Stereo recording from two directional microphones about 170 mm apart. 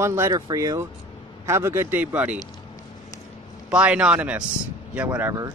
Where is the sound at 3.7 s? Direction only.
5° right (ahead or behind).